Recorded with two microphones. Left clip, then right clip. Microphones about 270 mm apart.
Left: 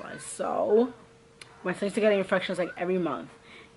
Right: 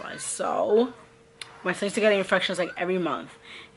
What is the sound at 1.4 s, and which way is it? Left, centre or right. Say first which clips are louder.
Speech: right 3 dB; centre.